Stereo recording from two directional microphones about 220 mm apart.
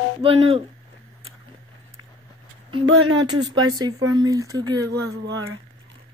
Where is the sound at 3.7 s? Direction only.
15° right (ahead or behind).